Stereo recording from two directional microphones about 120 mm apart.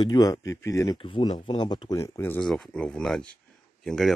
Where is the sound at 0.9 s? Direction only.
45° left (ahead or behind); by 2.4 s 20° left (ahead or behind).